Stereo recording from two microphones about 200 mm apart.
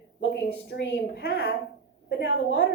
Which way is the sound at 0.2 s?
65° left (ahead or behind).